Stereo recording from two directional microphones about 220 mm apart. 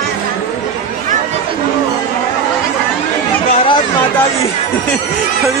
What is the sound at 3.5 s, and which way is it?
Chatter, 25° left (ahead or behind).